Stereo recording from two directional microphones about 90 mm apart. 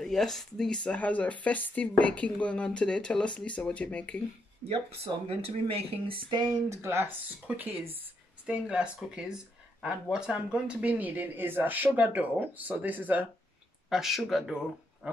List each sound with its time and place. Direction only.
0.0 s speech: 5° left (ahead or behind)
4.6 s speech: 90° right
6.7 s speech: 30° right (ahead or behind)
8.5 s speech: 10° right (ahead or behind)
13.8 s speech: 5° right (ahead or behind)